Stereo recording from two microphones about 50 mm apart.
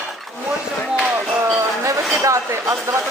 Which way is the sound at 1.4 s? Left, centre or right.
Right.